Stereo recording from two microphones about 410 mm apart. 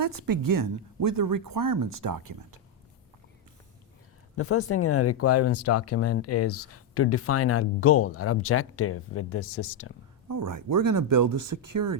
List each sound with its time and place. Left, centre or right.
0.0 s speech: right
4.4 s speech: left
10.2 s speech: right